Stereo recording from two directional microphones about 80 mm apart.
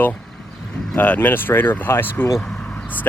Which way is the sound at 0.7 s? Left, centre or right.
Centre.